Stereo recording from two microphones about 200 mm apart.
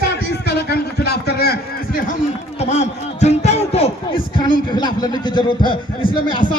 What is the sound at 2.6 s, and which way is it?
A man's voice, 35° left (ahead or behind).